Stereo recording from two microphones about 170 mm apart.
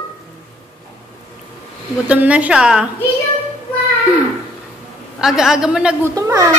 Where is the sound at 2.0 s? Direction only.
10° right (ahead or behind).